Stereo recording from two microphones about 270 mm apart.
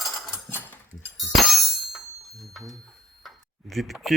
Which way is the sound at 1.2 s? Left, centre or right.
Centre.